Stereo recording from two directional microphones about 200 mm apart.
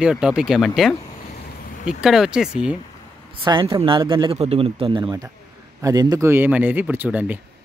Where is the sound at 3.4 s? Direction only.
25° right (ahead or behind).